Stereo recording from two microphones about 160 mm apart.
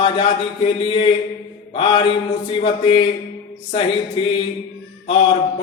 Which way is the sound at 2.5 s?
35° left (ahead or behind).